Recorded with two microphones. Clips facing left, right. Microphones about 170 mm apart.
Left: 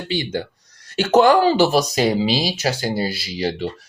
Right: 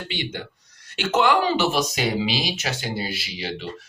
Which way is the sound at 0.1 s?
40° left (ahead or behind).